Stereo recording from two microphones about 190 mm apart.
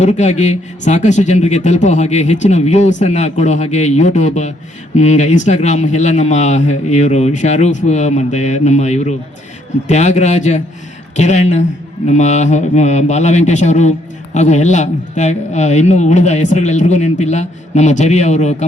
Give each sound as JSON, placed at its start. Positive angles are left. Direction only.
{"t": 0.0, "sound": "speech", "side_deg": 35}